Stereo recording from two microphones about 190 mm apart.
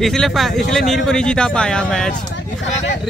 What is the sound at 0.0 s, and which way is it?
Speech, centre (ahead or behind).